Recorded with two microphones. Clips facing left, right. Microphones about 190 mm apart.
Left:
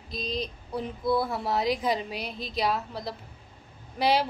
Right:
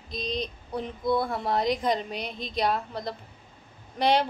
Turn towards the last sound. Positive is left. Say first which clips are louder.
# right 1 dB
turn(degrees=5)  # may be behind; listen again after turning